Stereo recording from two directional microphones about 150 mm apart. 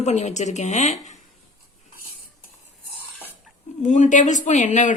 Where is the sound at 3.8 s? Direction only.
55° left (ahead or behind).